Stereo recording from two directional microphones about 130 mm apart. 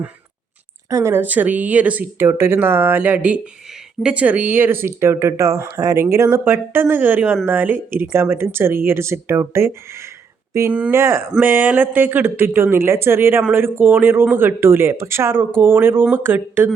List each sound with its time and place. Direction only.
0.9 s speech: 25° right (ahead or behind)